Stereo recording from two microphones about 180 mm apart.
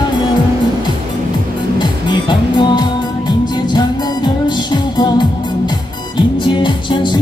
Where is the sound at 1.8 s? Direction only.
25° left (ahead or behind).